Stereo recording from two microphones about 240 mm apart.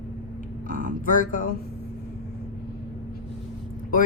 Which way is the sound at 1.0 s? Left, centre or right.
Left.